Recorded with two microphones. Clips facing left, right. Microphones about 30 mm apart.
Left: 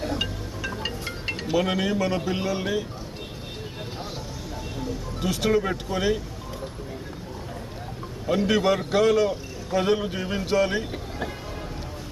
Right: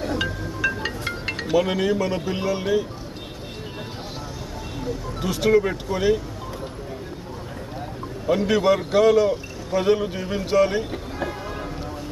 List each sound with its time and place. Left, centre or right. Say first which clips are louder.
0.8 s music: right 3 dB; right
1.5 s speech: right 3 dB; centre
5.2 s speech: right 4 dB; centre
8.3 s speech: right 3 dB; centre